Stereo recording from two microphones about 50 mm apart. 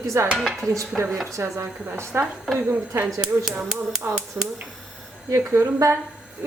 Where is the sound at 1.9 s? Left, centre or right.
Right.